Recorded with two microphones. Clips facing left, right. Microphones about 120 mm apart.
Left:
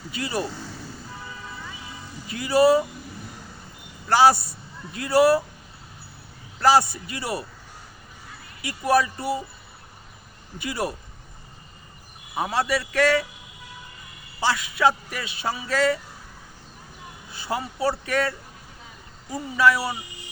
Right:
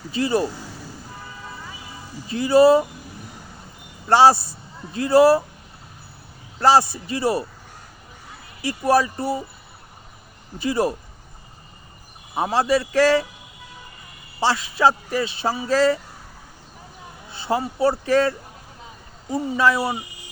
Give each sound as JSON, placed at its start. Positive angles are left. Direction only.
{"t": 0.1, "sound": "speech", "side_deg": -30}
{"t": 2.2, "sound": "speech", "side_deg": -30}
{"t": 4.1, "sound": "speech", "side_deg": -25}
{"t": 6.6, "sound": "speech", "side_deg": -30}
{"t": 8.6, "sound": "speech", "side_deg": -30}
{"t": 10.6, "sound": "speech", "side_deg": -30}
{"t": 12.3, "sound": "speech", "side_deg": -30}
{"t": 14.4, "sound": "a man's voice", "side_deg": -30}
{"t": 17.3, "sound": "speech", "side_deg": -30}